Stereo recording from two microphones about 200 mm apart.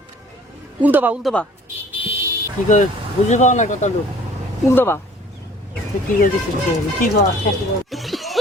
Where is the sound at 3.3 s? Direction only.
35° left (ahead or behind).